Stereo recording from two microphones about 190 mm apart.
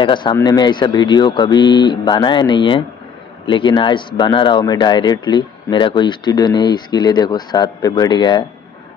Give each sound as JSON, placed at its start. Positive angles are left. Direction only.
{"t": 0.0, "sound": "speech", "side_deg": 25}